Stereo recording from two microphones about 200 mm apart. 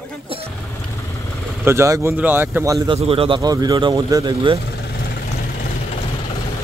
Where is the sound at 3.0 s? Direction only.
30° right (ahead or behind).